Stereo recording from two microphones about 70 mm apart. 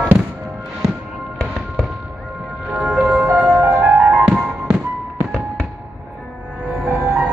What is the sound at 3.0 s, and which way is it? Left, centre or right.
Music, right.